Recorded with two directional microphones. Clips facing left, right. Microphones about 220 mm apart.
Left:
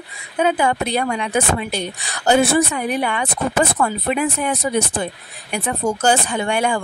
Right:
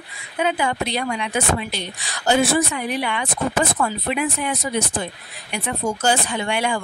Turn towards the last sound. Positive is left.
turn(degrees=50)  # may be behind; listen again after turning